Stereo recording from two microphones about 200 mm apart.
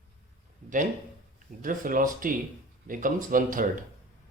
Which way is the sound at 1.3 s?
45° right (ahead or behind).